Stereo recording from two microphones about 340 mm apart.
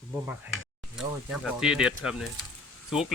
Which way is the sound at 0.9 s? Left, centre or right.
Centre.